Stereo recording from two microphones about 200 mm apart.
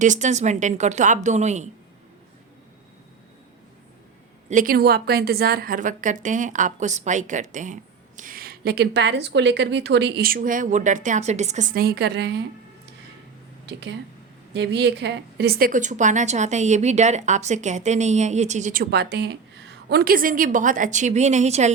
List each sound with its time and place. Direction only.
0.0 s a woman's voice: 40° right (ahead or behind)
4.4 s a woman's voice: 45° right (ahead or behind)
13.7 s a woman's voice: 60° right (ahead or behind); by 21.7 s 35° right (ahead or behind)